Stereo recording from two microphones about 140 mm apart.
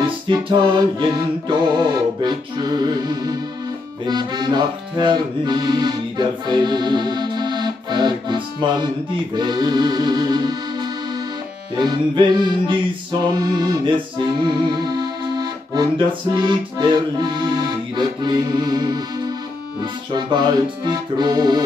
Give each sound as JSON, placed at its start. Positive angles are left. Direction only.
{"t": 0.0, "sound": "music", "side_deg": -35}
{"t": 1.8, "sound": "accordion", "side_deg": -30}
{"t": 11.8, "sound": "music", "side_deg": -30}
{"t": 16.3, "sound": "accordion", "side_deg": -30}